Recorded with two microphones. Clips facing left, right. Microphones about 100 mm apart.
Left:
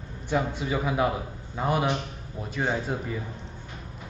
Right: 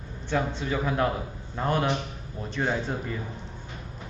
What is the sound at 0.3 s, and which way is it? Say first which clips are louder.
A man's voice: left 1 dB; 10° left (ahead or behind).